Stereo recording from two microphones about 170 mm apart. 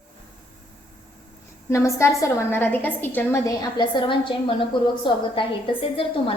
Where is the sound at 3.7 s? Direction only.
25° left (ahead or behind).